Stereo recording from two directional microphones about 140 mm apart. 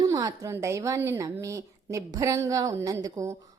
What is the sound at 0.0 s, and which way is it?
Speech, 25° right (ahead or behind).